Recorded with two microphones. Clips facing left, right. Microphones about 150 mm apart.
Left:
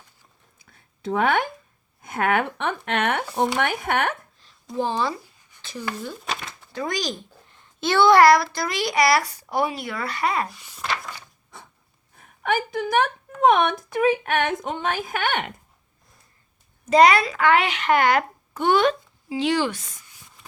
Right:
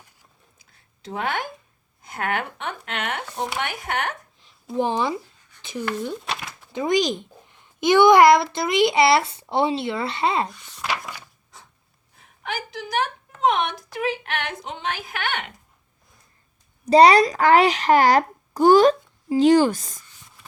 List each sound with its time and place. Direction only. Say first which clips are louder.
0.6 s a sound: left 9 dB; 55° left (ahead or behind)
2.0 s speech: left 5 dB; 55° left (ahead or behind)
4.8 s speech: right 2 dB; 15° right (ahead or behind)
6.7 s a child's voice: right 6 dB; 20° right (ahead or behind)
10.5 s speech: right 1 dB; 5° left (ahead or behind)
10.8 s a sound: right 1 dB; 10° right (ahead or behind)
12.2 s a woman's voice: left 7 dB; 50° left (ahead or behind)
16.8 s a child's voice: right 3 dB; 35° right (ahead or behind)